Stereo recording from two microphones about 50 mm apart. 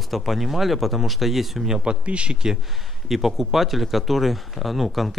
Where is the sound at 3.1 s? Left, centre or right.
Centre.